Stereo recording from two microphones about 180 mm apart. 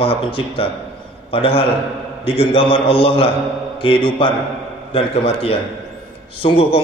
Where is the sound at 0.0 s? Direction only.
30° left (ahead or behind).